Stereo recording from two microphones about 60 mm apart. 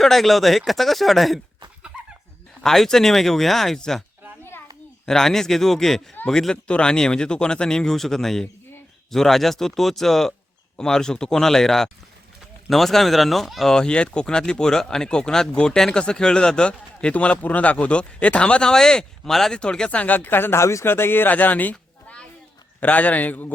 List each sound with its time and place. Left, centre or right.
0.0 s speech: centre
2.6 s speech: centre
5.0 s speech: centre
13.7 s speech: centre; by 20.6 s left
20.6 s a man's voice: left